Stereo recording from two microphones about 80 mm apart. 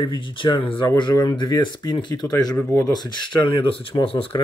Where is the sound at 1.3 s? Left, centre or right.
Left.